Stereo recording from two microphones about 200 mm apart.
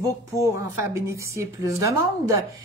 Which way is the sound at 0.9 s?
15° right (ahead or behind).